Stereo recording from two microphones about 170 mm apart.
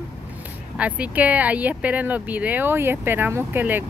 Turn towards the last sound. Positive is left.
turn(degrees=-10)  # may be behind; listen again after turning